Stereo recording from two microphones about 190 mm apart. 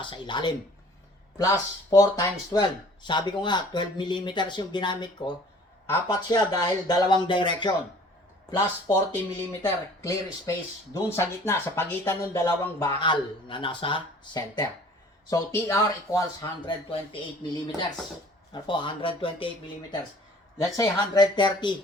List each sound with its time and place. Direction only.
0.0 s speech: 25° left (ahead or behind)
13.0 s speech: 25° left (ahead or behind)
20.6 s speech: 20° left (ahead or behind)